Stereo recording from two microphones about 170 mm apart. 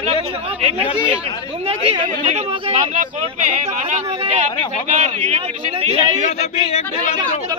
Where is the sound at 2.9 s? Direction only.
50° right (ahead or behind).